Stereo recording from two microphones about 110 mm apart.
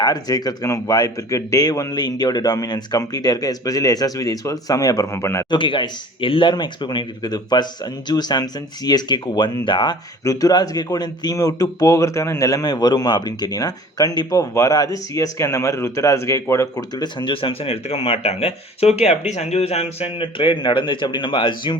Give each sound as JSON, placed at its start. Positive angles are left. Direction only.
{"t": 0.0, "sound": "speech", "side_deg": 35}
{"t": 5.5, "sound": "speech", "side_deg": 50}